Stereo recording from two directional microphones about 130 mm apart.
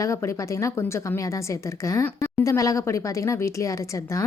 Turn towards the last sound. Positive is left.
turn(degrees=25)  # may be behind; listen again after turning